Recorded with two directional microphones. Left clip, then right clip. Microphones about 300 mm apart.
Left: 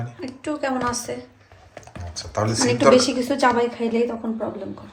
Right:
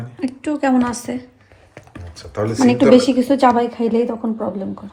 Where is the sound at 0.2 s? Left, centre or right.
Right.